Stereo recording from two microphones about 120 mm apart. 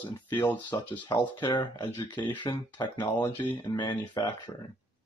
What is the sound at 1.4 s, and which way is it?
Speech, 40° left (ahead or behind).